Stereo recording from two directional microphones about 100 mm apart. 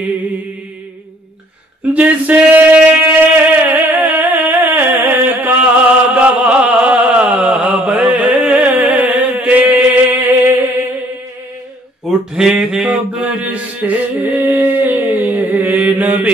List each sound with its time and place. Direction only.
2.0 s male singing: 15° right (ahead or behind)
3.6 s music: 20° right (ahead or behind)
7.0 s a sound: 10° right (ahead or behind)
12.0 s mantra: 5° right (ahead or behind)